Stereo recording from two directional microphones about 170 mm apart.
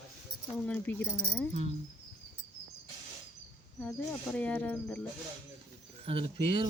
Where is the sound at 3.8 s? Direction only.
5° left (ahead or behind).